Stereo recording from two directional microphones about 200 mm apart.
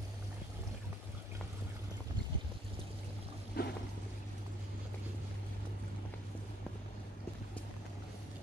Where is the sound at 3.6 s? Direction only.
50° left (ahead or behind).